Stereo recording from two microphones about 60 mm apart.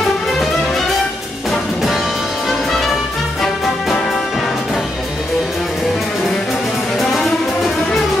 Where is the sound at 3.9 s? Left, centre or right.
Centre.